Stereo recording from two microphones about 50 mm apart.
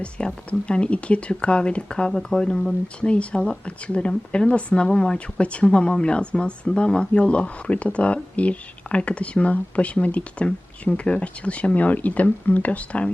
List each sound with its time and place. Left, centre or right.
0.0 s speech: left
3.0 s speech: left